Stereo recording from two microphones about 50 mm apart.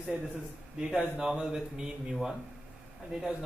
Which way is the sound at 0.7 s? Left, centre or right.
Centre.